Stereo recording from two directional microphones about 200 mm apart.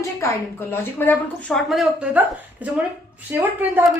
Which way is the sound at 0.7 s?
10° left (ahead or behind).